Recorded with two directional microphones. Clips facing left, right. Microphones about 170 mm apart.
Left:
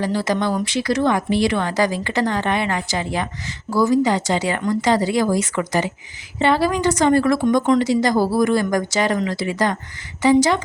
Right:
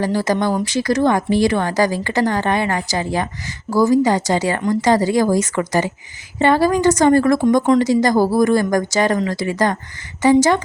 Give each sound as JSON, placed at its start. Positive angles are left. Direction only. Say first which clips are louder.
{"t": 0.0, "sound": "a woman's voice", "louder": "right 2 dB", "side_deg": -45}